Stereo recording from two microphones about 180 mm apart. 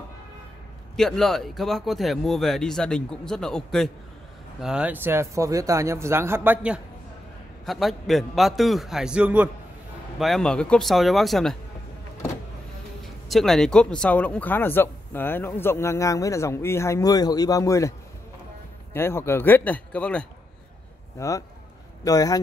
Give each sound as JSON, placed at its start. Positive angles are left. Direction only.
{"t": 0.9, "sound": "speech", "side_deg": 0}
{"t": 13.0, "sound": "speech", "side_deg": 0}
{"t": 18.9, "sound": "speech", "side_deg": 15}
{"t": 21.2, "sound": "speech", "side_deg": 15}